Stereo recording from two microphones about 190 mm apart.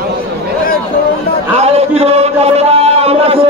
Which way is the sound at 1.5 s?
35° right (ahead or behind).